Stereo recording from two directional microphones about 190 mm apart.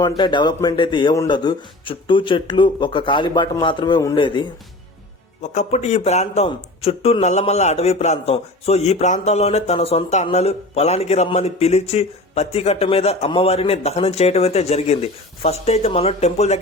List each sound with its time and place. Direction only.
0.0 s speech: 25° left (ahead or behind)
5.4 s a man's voice: 35° left (ahead or behind)